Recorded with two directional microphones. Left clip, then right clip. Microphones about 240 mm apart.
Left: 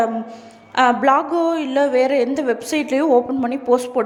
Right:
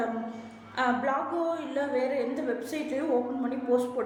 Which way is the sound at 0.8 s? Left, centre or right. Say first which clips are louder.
Left 13 dB; left.